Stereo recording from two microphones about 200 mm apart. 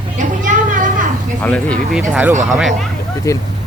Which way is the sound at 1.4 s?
5° left (ahead or behind).